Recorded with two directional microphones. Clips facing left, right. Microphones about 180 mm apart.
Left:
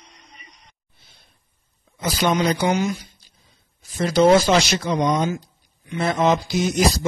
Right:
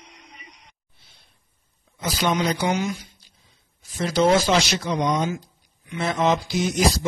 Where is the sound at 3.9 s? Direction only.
45° left (ahead or behind).